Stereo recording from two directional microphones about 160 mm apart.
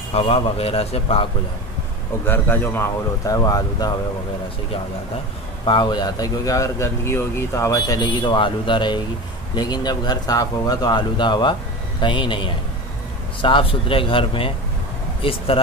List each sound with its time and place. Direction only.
0.1 s a man's voice: 40° left (ahead or behind)
2.2 s a man's voice: 15° left (ahead or behind)
5.7 s a man's voice: 30° left (ahead or behind)